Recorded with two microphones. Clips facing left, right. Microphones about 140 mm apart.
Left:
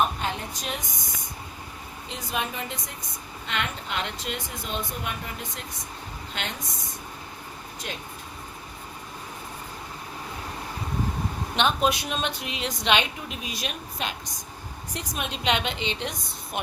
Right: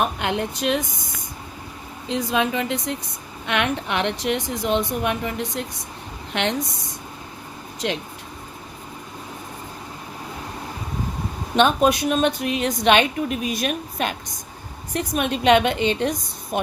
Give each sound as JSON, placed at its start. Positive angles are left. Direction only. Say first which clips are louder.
{"t": 0.2, "sound": "speech", "louder": "right 7 dB", "side_deg": -70}
{"t": 2.0, "sound": "speech", "louder": "right 9 dB", "side_deg": -90}
{"t": 11.5, "sound": "a woman's voice", "louder": "right 7 dB", "side_deg": -45}